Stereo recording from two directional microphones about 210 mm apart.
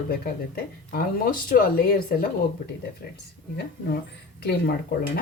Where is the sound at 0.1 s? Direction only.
45° left (ahead or behind).